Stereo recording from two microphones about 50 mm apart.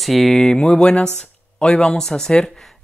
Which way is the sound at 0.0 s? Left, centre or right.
Centre.